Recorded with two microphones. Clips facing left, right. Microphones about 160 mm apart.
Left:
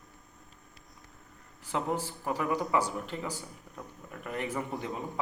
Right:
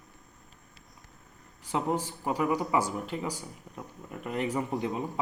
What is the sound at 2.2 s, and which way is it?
Speech, 10° right (ahead or behind).